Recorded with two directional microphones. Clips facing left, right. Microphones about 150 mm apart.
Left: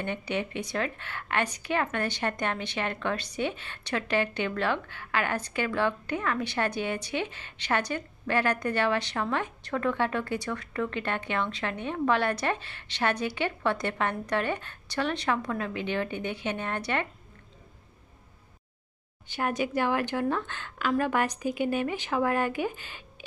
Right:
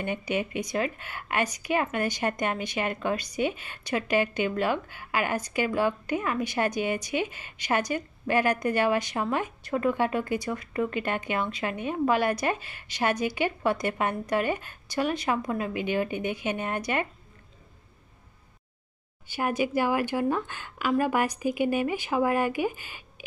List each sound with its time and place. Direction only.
0.0 s a woman's voice: 10° right (ahead or behind)
19.2 s a woman's voice: 10° right (ahead or behind)